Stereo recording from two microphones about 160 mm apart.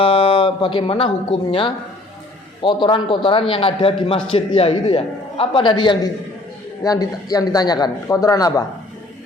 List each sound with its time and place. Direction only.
0.0 s a man's voice: 35° left (ahead or behind)